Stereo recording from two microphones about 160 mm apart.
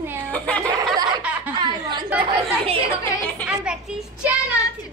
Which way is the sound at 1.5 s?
30° right (ahead or behind).